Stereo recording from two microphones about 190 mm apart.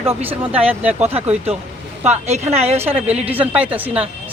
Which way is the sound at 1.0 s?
35° right (ahead or behind).